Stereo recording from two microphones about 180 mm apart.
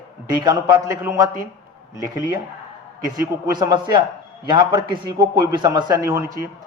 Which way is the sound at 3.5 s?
25° right (ahead or behind).